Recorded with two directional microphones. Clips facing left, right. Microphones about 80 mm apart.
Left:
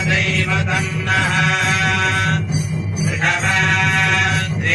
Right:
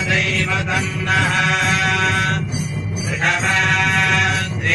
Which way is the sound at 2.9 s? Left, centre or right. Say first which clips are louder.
Even; centre.